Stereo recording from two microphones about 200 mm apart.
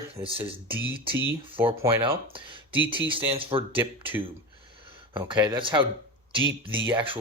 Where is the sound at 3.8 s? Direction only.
10° right (ahead or behind).